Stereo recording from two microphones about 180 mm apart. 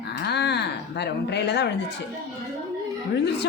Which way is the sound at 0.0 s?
65° left (ahead or behind).